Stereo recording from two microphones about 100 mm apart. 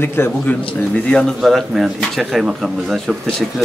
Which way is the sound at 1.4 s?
Centre (ahead or behind).